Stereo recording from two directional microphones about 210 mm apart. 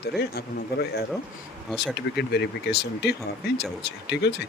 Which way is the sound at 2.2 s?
50° left (ahead or behind).